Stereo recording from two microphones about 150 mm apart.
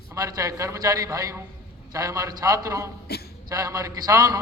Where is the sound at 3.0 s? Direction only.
90° left.